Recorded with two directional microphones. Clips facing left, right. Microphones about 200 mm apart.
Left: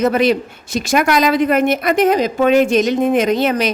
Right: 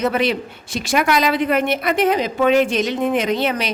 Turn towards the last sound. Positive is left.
turn(degrees=45)  # may be behind; listen again after turning